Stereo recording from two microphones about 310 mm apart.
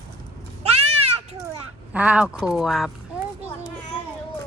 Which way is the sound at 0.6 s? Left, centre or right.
Centre.